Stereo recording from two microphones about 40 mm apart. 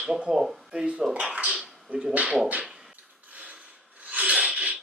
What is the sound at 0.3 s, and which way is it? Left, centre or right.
Speech, centre.